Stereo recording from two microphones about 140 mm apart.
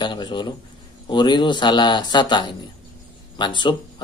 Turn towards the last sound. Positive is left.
turn(degrees=35)  # may be behind; listen again after turning